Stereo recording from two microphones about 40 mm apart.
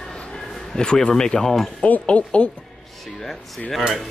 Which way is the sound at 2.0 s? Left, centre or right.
Left.